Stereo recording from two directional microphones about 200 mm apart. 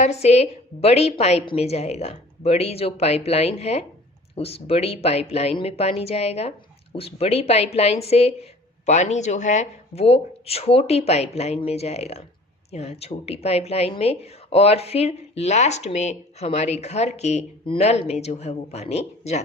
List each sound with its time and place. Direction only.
0.0 s a woman's voice: 30° left (ahead or behind)